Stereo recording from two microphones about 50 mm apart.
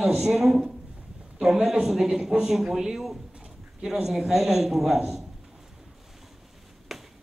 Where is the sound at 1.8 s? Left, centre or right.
Centre.